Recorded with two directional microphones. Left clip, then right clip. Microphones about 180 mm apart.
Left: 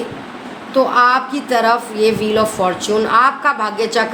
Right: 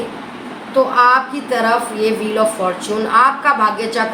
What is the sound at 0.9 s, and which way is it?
A woman's voice, 50° left (ahead or behind).